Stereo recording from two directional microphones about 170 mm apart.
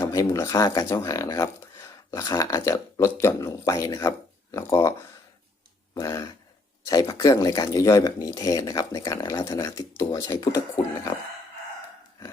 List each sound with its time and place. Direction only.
0.0 s speech: 20° left (ahead or behind)